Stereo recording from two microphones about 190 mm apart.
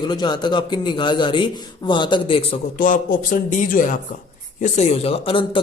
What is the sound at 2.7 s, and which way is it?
A man's voice, 45° left (ahead or behind).